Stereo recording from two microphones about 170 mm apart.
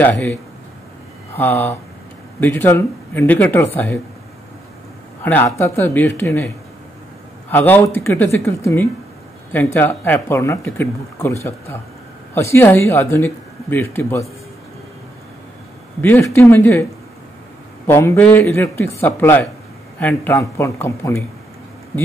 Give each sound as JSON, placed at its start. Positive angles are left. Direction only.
{"t": 0.0, "sound": "speech", "side_deg": 10}
{"t": 5.2, "sound": "speech", "side_deg": 15}
{"t": 7.5, "sound": "speech", "side_deg": 10}
{"t": 16.0, "sound": "speech", "side_deg": 15}
{"t": 17.8, "sound": "speech", "side_deg": 15}